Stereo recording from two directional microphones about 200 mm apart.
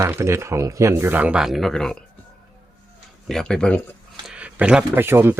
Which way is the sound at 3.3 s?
5° left (ahead or behind).